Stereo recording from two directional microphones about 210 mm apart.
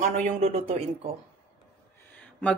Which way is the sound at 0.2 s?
30° right (ahead or behind).